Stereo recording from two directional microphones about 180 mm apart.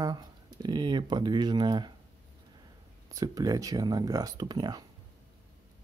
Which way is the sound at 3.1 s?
20° right (ahead or behind).